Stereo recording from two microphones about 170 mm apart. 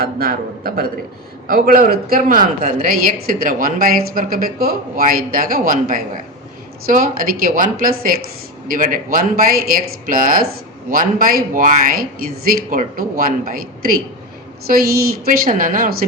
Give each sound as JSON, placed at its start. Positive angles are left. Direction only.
{"t": 0.0, "sound": "a man's voice", "side_deg": -60}